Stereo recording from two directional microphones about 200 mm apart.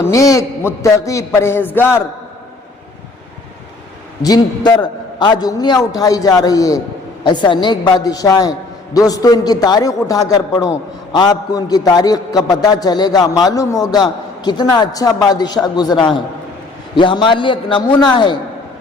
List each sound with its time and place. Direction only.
0.0 s a man's voice: 15° left (ahead or behind)
4.2 s a man's voice: 20° left (ahead or behind)